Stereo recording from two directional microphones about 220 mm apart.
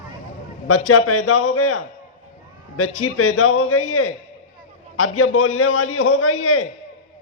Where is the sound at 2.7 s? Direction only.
80° left.